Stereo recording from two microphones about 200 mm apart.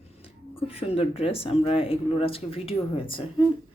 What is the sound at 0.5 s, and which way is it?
Speech, 30° left (ahead or behind).